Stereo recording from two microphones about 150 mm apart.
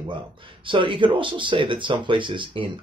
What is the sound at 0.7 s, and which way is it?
Speech, 35° right (ahead or behind).